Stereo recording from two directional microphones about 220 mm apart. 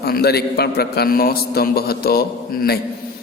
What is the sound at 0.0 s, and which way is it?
A man's voice, 45° left (ahead or behind).